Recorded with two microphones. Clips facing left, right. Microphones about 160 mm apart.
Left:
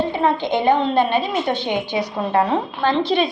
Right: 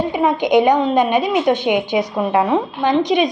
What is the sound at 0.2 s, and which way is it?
A woman's voice, 15° right (ahead or behind).